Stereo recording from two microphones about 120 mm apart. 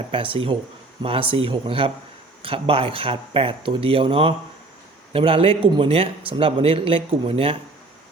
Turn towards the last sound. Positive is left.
turn(degrees=-50)  # may be behind; listen again after turning